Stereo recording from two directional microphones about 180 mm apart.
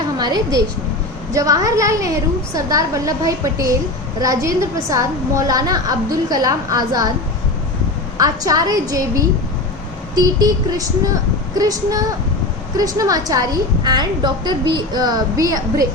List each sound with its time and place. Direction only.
0.2 s a woman's voice: 20° right (ahead or behind)
8.2 s a woman's voice: 20° right (ahead or behind)